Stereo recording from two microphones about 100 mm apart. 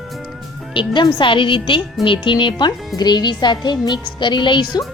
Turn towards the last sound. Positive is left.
turn(degrees=50)  # may be behind; listen again after turning